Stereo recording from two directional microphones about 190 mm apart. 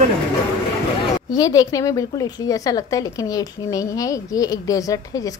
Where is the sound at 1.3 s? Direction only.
20° left (ahead or behind).